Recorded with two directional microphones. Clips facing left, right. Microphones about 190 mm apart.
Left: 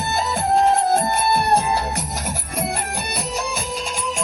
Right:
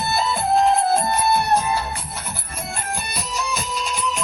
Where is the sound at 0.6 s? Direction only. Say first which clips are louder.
Left 1 dB; 45° left (ahead or behind).